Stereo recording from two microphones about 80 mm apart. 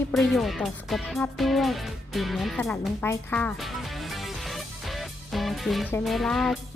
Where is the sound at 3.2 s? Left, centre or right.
Left.